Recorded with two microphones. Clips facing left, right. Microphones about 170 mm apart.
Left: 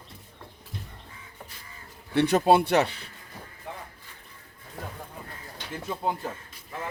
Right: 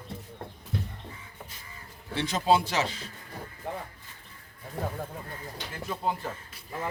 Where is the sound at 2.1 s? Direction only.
60° left (ahead or behind).